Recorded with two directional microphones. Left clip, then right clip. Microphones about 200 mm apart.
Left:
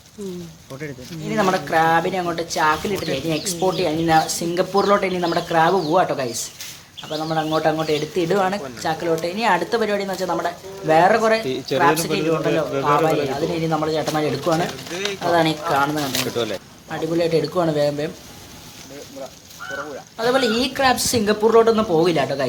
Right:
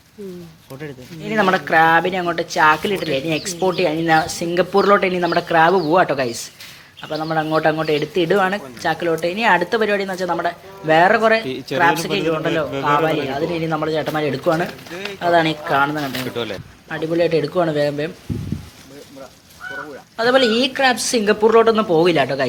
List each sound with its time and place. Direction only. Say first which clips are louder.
1.2 s speech: right 3 dB; 20° right (ahead or behind)
11.4 s speech: left 2 dB; 40° right (ahead or behind)
11.8 s speech: right 2 dB; 15° right (ahead or behind)
20.1 s speech: right 4 dB; 20° right (ahead or behind)